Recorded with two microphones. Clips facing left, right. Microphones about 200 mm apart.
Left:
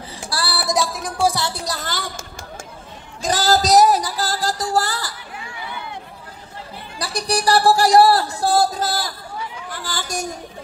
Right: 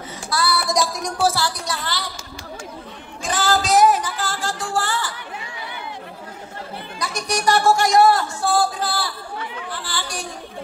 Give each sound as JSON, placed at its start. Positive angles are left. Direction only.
{"t": 0.3, "sound": "female singing", "side_deg": 30}
{"t": 0.7, "sound": "music", "side_deg": 5}
{"t": 1.2, "sound": "music", "side_deg": 20}
{"t": 1.6, "sound": "a woman's voice", "side_deg": 40}
{"t": 3.2, "sound": "music", "side_deg": 40}
{"t": 7.0, "sound": "a sound", "side_deg": 35}